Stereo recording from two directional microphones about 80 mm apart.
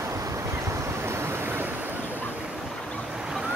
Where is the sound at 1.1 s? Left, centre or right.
Right.